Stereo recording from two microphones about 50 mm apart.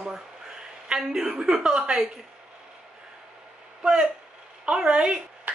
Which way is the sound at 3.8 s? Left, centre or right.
Centre.